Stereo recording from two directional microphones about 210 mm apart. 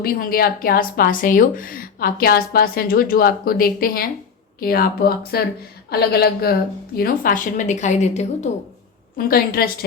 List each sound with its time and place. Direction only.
0.0 s a woman's voice: 45° left (ahead or behind)
9.1 s speech: 45° left (ahead or behind)